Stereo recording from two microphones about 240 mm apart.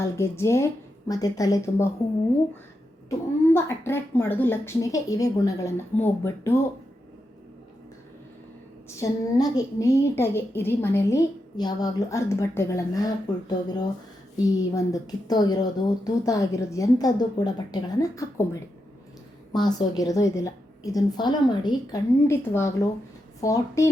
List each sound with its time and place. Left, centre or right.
0.0 s a woman's voice: centre
3.1 s a woman's voice: centre
9.0 s a woman's voice: centre
19.5 s a woman's voice: centre